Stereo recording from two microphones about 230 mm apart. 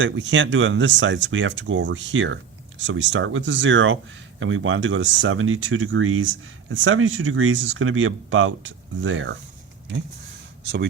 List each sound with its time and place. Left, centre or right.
0.0 s speech: right